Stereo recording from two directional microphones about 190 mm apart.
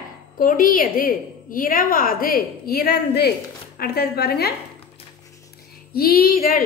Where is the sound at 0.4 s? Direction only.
45° left (ahead or behind).